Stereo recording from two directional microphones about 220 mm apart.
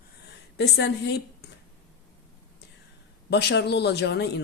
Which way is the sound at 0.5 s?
50° left (ahead or behind).